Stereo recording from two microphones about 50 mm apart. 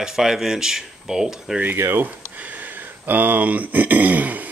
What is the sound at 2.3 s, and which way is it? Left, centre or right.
Speech, right.